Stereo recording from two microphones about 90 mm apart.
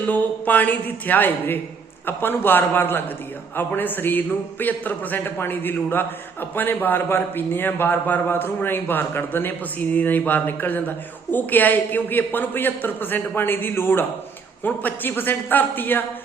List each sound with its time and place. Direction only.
0.1 s a man's voice: 20° left (ahead or behind)